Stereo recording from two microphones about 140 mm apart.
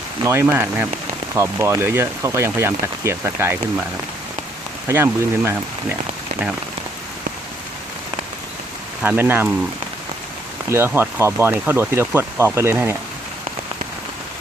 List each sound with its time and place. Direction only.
0.2 s speech: 20° right (ahead or behind)
4.9 s speech: 15° right (ahead or behind)
9.0 s speech: 15° right (ahead or behind)
10.7 s speech: 15° right (ahead or behind)